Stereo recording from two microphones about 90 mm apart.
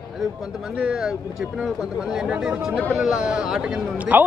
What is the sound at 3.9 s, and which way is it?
Speech, 15° right (ahead or behind).